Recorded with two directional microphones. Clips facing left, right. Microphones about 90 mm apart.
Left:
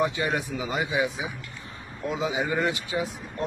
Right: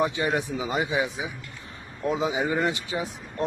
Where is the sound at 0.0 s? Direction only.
25° right (ahead or behind).